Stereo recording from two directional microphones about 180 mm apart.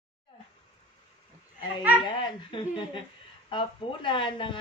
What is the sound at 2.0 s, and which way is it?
A woman's voice, 25° left (ahead or behind).